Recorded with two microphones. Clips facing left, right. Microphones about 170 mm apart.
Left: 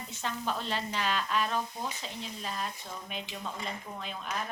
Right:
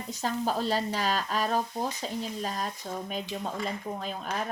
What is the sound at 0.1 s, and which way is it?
Speech, 40° right (ahead or behind).